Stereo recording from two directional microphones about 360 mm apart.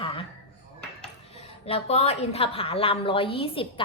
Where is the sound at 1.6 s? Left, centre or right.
Centre.